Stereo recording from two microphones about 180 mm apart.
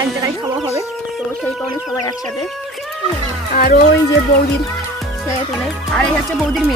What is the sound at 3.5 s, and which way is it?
Speech, 55° left (ahead or behind).